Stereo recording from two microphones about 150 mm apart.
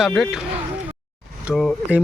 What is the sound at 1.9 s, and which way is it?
Speech, 10° right (ahead or behind).